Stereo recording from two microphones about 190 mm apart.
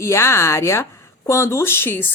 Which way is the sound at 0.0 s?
15° left (ahead or behind).